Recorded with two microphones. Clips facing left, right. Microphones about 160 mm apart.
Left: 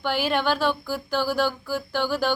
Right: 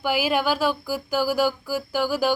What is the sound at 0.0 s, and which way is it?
Speech, 10° right (ahead or behind).